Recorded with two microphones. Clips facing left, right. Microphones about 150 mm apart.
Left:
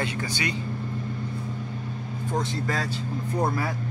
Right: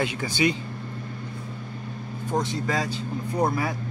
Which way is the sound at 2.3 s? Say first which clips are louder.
Right 2 dB; 15° right (ahead or behind).